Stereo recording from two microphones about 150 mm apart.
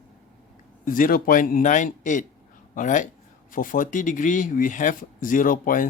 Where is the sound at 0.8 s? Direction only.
70° left (ahead or behind).